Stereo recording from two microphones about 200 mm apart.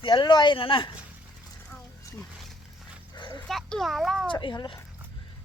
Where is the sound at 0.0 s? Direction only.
25° left (ahead or behind).